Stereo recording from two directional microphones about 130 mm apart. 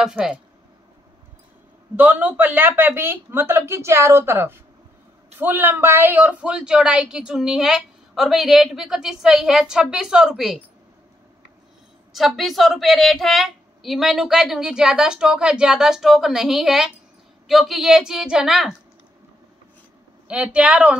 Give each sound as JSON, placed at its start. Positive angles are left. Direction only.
{"t": 0.0, "sound": "a woman's voice", "side_deg": -5}
{"t": 2.0, "sound": "a woman's voice", "side_deg": -15}
{"t": 12.1, "sound": "a woman's voice", "side_deg": 0}
{"t": 20.2, "sound": "a woman's voice", "side_deg": -10}